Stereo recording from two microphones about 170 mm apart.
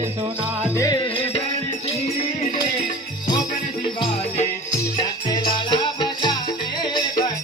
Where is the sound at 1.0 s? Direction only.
30° left (ahead or behind).